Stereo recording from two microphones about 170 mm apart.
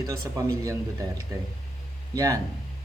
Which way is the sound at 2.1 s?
20° right (ahead or behind).